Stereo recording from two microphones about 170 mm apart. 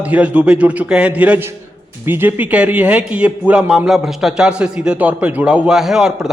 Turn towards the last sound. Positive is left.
turn(degrees=-5)  # may be behind; listen again after turning